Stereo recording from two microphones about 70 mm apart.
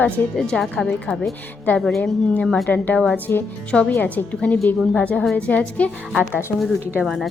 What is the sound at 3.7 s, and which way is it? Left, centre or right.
A woman's voice, centre.